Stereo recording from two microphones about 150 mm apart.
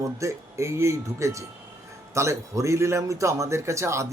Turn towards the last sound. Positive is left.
turn(degrees=-20)  # may be behind; listen again after turning